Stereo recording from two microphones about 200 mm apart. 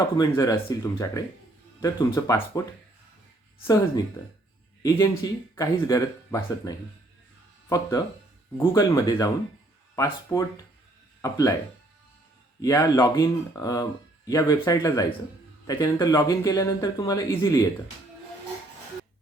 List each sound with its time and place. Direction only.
0.2 s speech: 15° left (ahead or behind)
3.6 s speech: 20° left (ahead or behind)
12.6 s speech: 15° left (ahead or behind)